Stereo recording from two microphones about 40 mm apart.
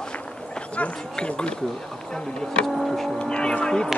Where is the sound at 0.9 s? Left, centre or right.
Left.